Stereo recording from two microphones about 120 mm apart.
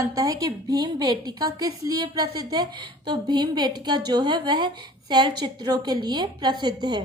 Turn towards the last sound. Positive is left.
turn(degrees=-35)  # may be behind; listen again after turning